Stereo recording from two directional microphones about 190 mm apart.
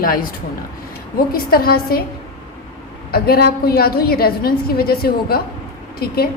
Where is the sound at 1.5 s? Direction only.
50° left (ahead or behind).